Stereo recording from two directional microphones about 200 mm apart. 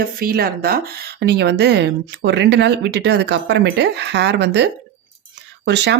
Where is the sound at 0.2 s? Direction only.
50° right (ahead or behind).